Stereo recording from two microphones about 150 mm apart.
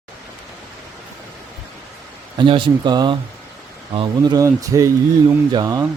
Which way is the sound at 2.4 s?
35° right (ahead or behind).